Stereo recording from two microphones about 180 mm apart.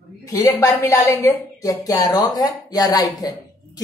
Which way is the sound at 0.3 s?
20° left (ahead or behind).